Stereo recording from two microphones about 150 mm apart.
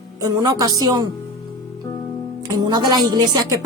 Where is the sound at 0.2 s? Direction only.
25° right (ahead or behind).